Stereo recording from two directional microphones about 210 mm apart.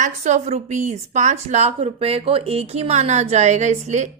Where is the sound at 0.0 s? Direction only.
35° right (ahead or behind).